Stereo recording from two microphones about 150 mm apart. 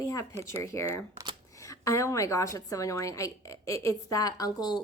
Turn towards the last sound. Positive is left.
turn(degrees=25)  # may be behind; listen again after turning